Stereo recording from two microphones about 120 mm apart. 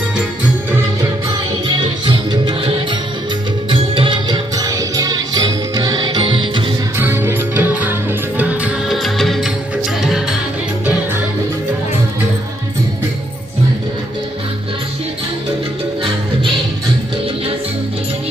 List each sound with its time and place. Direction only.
2.0 s music: 40° right (ahead or behind)
6.9 s music: 20° right (ahead or behind)
9.0 s music: centre (ahead or behind)